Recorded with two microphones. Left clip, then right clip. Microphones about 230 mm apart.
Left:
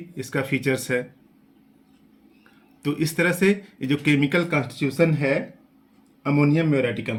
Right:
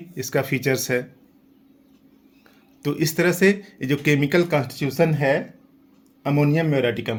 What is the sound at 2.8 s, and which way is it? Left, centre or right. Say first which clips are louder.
Speech: right 1 dB; right.